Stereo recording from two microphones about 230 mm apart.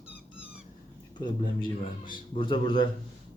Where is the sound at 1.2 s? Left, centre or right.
Centre.